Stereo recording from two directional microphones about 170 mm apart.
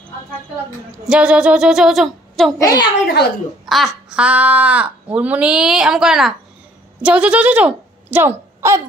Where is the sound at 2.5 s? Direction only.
20° left (ahead or behind).